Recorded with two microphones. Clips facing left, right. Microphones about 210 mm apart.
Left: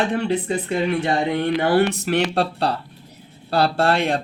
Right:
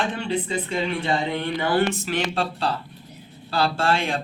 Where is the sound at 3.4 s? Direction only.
60° left (ahead or behind).